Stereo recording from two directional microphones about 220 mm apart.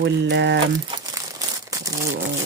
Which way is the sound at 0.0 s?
50° right (ahead or behind).